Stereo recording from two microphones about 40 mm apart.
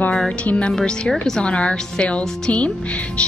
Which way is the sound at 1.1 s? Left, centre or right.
Centre.